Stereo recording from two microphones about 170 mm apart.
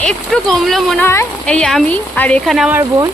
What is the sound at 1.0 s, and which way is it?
Speech, 15° left (ahead or behind).